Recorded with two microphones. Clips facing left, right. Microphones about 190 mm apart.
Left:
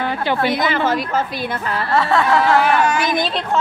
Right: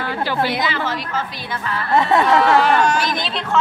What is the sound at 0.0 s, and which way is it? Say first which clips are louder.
Speech: left 2 dB; 20° left (ahead or behind).